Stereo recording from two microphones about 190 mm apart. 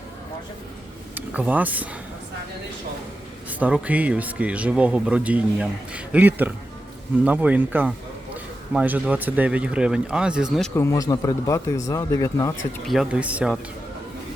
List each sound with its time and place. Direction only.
1.1 s speech: 10° right (ahead or behind)
3.6 s speech: 5° right (ahead or behind)
10.8 s speech: 15° left (ahead or behind)
12.9 s speech: 5° right (ahead or behind)